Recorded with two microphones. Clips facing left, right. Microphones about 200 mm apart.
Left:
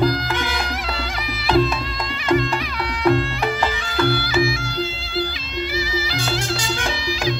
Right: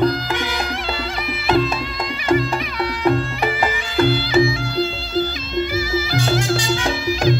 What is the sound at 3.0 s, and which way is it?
Music, 5° right (ahead or behind).